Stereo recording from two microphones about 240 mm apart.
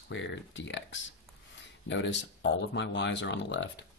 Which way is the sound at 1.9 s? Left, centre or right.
Left.